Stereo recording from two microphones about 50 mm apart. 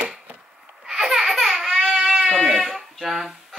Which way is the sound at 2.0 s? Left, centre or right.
Centre.